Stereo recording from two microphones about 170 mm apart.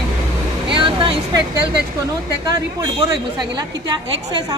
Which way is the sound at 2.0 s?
20° right (ahead or behind).